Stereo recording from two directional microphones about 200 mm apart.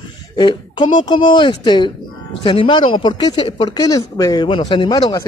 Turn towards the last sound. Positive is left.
turn(degrees=20)  # may be behind; listen again after turning